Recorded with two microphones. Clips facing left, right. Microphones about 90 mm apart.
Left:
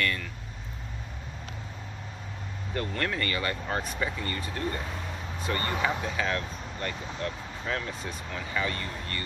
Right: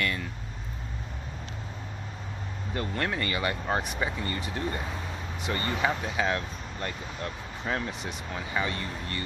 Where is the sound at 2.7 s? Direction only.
10° right (ahead or behind).